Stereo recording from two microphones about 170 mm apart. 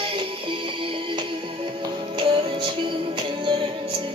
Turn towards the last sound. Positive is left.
turn(degrees=-30)  # may be behind; listen again after turning